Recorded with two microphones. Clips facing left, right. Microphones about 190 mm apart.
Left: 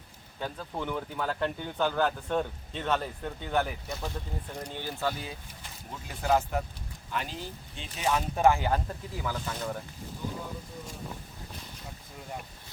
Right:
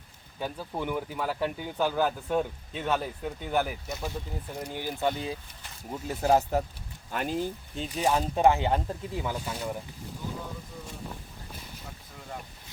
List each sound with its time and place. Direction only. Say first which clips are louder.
0.3 s speech: right 2 dB; 10° right (ahead or behind); by 5.4 s 25° right (ahead or behind)
5.9 s speech: right 3 dB; 40° right (ahead or behind)
7.1 s speech: right 6 dB; 50° right (ahead or behind)
8.4 s speech: right 1 dB; 20° right (ahead or behind)
10.3 s a sound: even; centre (ahead or behind)